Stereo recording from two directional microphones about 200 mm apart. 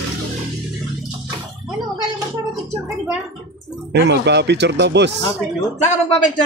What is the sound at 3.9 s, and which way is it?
Speech, 60° right (ahead or behind).